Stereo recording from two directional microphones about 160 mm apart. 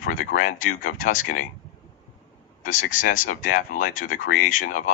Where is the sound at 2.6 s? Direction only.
55° left (ahead or behind).